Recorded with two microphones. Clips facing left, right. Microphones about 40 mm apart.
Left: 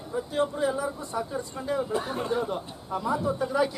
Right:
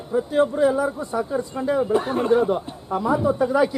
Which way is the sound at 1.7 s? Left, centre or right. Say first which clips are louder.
Right 8 dB; right.